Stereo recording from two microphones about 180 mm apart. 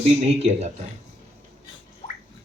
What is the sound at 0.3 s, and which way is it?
Speech, 35° right (ahead or behind).